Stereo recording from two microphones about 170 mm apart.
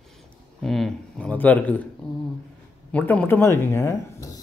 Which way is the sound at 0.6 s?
Centre (ahead or behind).